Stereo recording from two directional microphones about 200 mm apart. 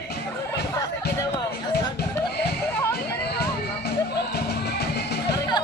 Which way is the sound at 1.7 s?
55° left (ahead or behind).